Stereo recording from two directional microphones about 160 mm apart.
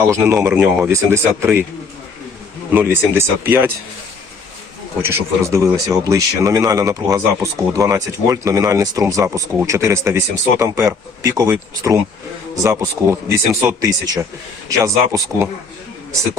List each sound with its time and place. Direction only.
0.4 s speech: 10° right (ahead or behind)
2.7 s speech: 15° right (ahead or behind)
5.0 s speech: 15° right (ahead or behind)